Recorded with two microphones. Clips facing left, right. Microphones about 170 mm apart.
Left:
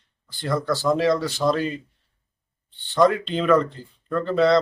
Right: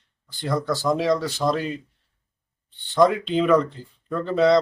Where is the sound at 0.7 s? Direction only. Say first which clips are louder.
Left 2 dB; 10° right (ahead or behind).